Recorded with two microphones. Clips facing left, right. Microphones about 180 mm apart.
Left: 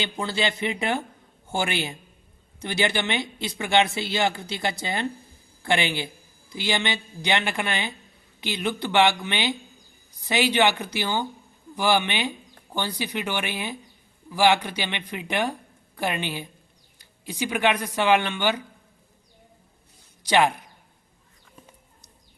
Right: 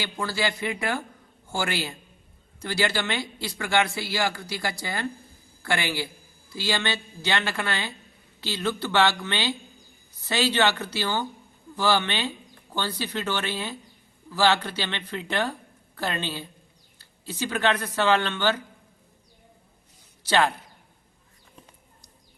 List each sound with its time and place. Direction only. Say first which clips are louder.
0.0 s speech: left 1 dB; 20° left (ahead or behind)
20.2 s speech: left 2 dB; 15° left (ahead or behind)